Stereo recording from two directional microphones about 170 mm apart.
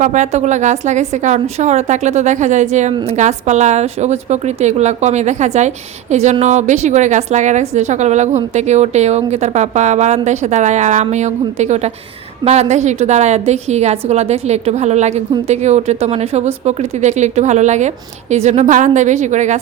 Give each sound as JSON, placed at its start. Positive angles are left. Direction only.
{"t": 0.0, "sound": "a woman's voice", "side_deg": -45}